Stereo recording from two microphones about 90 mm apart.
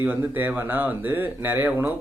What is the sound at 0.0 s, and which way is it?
Speech, 20° right (ahead or behind).